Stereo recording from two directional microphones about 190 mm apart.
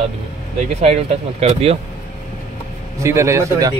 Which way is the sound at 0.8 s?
35° right (ahead or behind).